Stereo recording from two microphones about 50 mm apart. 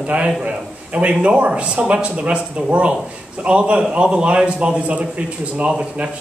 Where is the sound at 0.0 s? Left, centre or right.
Right.